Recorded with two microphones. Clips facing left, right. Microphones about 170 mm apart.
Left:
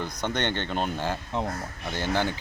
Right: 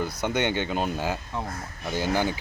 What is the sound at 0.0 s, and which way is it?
Speech, 10° right (ahead or behind).